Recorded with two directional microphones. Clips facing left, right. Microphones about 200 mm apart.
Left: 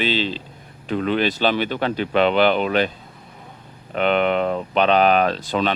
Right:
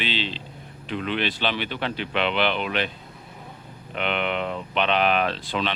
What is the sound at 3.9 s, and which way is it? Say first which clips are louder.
A man's voice: left 8 dB; 40° left (ahead or behind).